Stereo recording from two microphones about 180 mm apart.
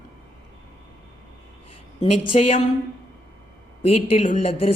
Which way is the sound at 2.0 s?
35° left (ahead or behind).